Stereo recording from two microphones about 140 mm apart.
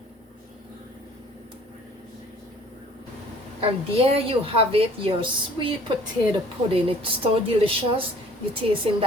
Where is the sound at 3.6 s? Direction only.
40° right (ahead or behind).